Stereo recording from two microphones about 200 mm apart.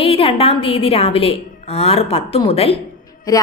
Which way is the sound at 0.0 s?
30° left (ahead or behind).